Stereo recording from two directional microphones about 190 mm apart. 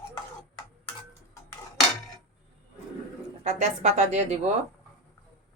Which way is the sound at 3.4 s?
35° right (ahead or behind).